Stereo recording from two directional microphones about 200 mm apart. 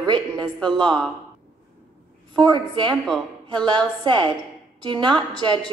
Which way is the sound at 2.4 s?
20° right (ahead or behind).